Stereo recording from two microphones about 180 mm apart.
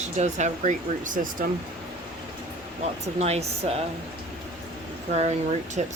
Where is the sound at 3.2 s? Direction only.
35° right (ahead or behind).